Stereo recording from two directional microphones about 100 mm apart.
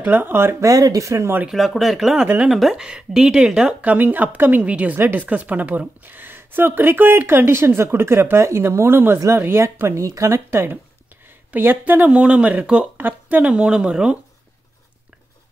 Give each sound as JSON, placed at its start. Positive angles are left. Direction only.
{"t": 0.0, "sound": "speech", "side_deg": -20}
{"t": 1.5, "sound": "speech", "side_deg": 0}
{"t": 2.2, "sound": "speech", "side_deg": -15}
{"t": 2.5, "sound": "speech", "side_deg": -5}